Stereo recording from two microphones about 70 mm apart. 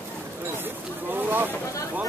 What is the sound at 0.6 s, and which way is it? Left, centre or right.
Vehicle, right.